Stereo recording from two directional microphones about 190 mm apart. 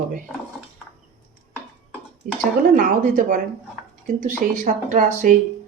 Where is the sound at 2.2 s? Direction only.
45° right (ahead or behind).